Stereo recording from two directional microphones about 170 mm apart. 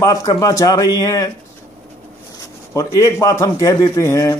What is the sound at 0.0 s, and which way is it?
Speech, 20° left (ahead or behind).